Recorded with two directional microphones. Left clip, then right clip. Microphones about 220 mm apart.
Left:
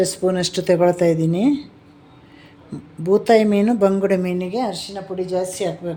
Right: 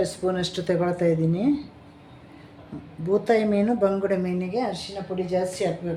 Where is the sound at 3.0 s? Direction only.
40° left (ahead or behind).